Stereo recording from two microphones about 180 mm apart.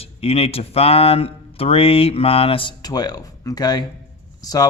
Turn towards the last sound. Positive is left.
turn(degrees=20)  # may be behind; listen again after turning